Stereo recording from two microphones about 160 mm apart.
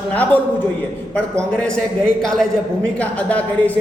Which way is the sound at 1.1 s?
5° left (ahead or behind).